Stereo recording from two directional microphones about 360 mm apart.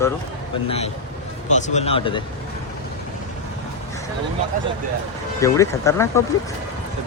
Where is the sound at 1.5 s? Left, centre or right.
Centre.